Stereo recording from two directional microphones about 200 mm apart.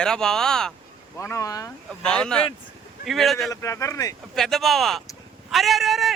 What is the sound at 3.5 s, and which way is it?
Speech, 15° left (ahead or behind).